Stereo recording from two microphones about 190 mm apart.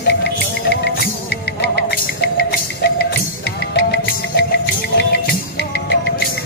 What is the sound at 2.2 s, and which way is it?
Music, 60° left (ahead or behind).